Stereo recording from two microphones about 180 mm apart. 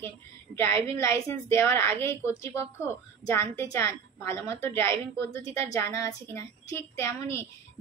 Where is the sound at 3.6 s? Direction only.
15° left (ahead or behind).